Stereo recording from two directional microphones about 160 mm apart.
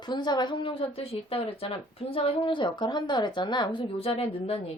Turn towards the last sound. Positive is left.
turn(degrees=40)  # may be behind; listen again after turning